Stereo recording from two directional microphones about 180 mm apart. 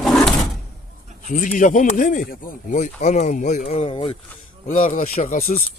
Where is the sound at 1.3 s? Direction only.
45° left (ahead or behind); by 4.2 s 30° left (ahead or behind).